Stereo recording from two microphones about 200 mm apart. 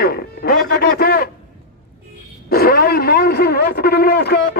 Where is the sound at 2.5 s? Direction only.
50° left (ahead or behind).